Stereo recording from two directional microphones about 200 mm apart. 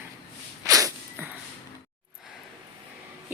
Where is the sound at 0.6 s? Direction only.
15° right (ahead or behind).